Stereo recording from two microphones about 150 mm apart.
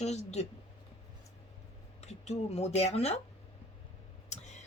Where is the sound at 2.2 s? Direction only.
45° left (ahead or behind).